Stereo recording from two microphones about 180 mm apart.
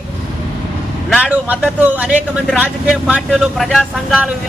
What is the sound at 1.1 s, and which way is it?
A man's voice, 10° right (ahead or behind).